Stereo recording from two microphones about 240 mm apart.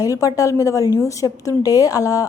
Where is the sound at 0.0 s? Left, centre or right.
Centre.